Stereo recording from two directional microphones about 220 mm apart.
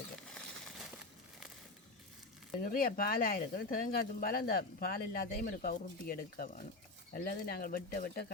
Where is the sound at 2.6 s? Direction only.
40° left (ahead or behind).